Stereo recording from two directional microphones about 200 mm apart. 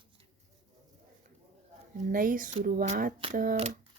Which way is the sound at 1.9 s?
45° right (ahead or behind).